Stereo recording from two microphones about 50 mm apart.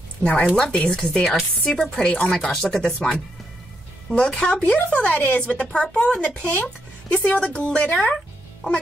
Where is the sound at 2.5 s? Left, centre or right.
Centre.